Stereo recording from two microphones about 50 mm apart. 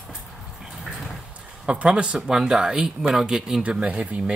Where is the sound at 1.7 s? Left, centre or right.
Right.